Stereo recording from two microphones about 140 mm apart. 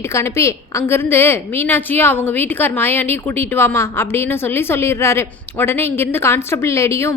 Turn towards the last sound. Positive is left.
turn(degrees=20)  # may be behind; listen again after turning